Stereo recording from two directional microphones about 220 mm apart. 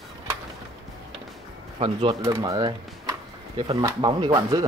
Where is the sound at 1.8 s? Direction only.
20° right (ahead or behind).